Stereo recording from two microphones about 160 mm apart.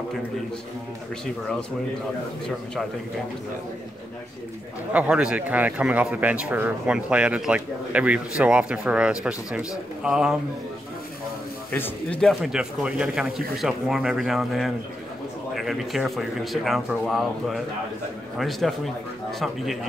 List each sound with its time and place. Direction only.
4.9 s speech: 5° right (ahead or behind)
11.7 s a man's voice: 15° left (ahead or behind)
12.2 s speech: centre (ahead or behind)